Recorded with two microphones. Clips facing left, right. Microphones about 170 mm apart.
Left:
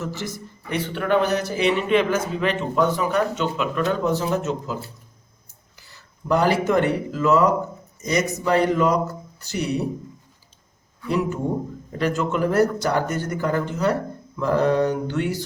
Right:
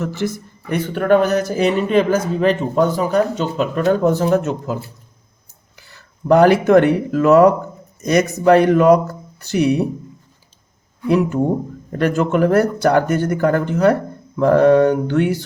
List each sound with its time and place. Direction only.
0.0 s speech: 60° right (ahead or behind)
0.7 s a man's voice: 45° right (ahead or behind)
11.9 s speech: 55° right (ahead or behind)
14.3 s mantra: 60° right (ahead or behind)